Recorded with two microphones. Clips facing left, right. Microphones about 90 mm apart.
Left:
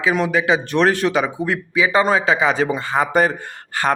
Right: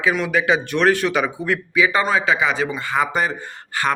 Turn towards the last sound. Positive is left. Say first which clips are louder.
# left 2 dB
turn(degrees=40)  # may be behind; listen again after turning